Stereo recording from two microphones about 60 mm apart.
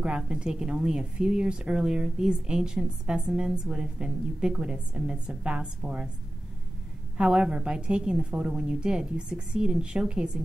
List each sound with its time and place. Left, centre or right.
0.2 s a woman's voice: centre
7.2 s a woman's voice: centre